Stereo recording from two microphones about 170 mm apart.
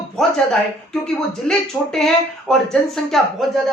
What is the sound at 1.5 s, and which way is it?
Speech, 5° left (ahead or behind).